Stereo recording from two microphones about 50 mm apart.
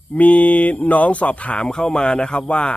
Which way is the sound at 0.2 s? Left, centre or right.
Left.